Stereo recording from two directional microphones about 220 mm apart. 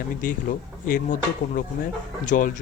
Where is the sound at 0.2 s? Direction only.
35° left (ahead or behind).